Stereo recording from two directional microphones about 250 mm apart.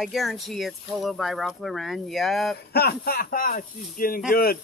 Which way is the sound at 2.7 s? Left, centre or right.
Left.